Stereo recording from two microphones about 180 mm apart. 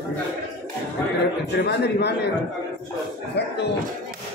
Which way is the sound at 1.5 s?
70° left (ahead or behind).